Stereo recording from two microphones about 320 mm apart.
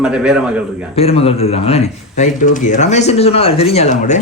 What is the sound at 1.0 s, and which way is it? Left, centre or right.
Speech, centre.